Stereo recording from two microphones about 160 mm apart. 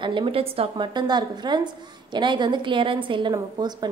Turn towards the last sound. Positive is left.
turn(degrees=-25)  # may be behind; listen again after turning